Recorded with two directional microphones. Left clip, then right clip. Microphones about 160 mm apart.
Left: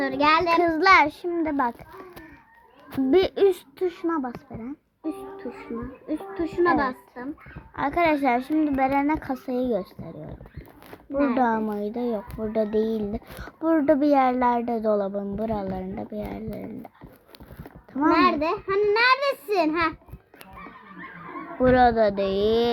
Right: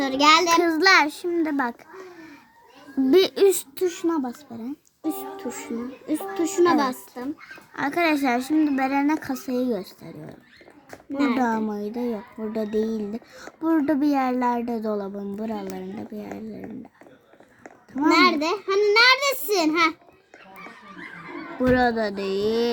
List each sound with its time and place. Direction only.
0.0 s a woman's voice: 20° right (ahead or behind)
3.1 s a woman's voice: 25° right (ahead or behind)
11.1 s speech: 15° right (ahead or behind)
17.9 s speech: 10° right (ahead or behind)
21.6 s speech: 10° right (ahead or behind)